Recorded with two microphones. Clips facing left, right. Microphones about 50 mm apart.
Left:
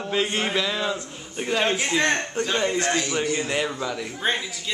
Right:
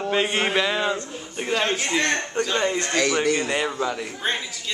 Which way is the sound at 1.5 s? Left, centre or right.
Centre.